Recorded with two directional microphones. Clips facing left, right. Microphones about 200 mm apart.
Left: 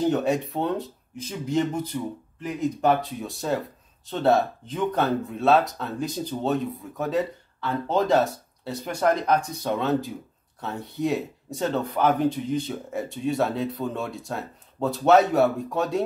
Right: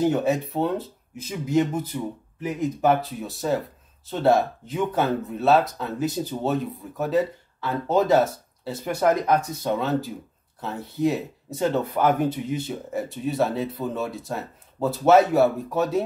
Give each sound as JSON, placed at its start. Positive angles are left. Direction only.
{"t": 0.0, "sound": "speech", "side_deg": -5}